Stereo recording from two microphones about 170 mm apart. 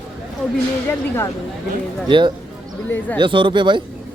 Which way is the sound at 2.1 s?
30° right (ahead or behind).